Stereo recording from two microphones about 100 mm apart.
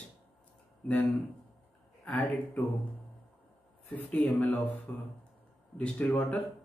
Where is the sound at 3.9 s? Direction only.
15° left (ahead or behind).